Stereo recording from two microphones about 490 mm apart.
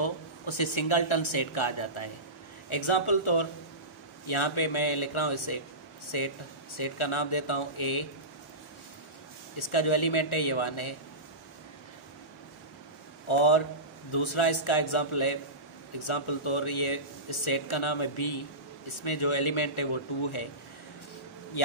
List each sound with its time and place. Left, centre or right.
0.0 s speech: left
9.6 s speech: left
13.3 s speech: left